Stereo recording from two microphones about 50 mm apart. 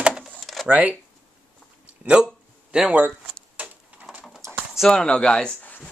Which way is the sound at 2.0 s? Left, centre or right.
Right.